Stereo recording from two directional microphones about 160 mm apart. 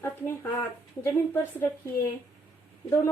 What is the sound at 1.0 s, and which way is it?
Speech, 15° left (ahead or behind).